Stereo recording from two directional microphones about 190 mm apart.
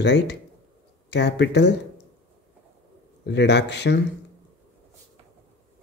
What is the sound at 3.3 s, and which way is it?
Speech, 65° left (ahead or behind).